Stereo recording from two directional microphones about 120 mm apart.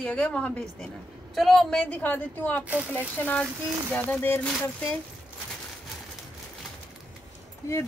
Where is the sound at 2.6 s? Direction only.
10° right (ahead or behind).